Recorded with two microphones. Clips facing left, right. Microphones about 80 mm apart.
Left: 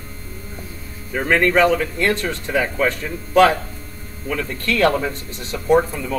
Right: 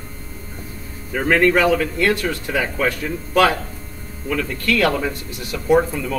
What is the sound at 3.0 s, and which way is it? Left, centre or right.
Speech, centre.